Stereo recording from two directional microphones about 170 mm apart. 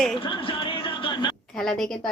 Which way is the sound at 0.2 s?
30° left (ahead or behind).